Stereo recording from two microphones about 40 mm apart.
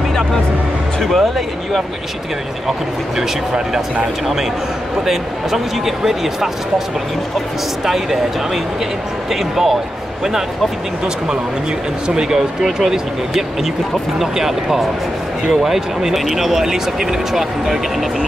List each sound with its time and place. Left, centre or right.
1.0 s speech: centre
5.0 s speech: centre
7.8 s speech: centre
9.3 s speech: centre
12.1 s speech: centre
14.1 s speech: centre